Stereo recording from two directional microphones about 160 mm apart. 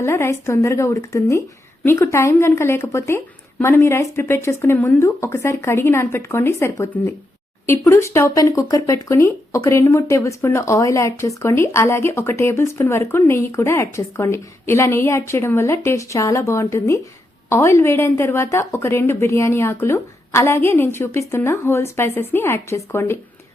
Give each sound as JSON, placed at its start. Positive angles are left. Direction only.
{"t": 0.0, "sound": "speech", "side_deg": 15}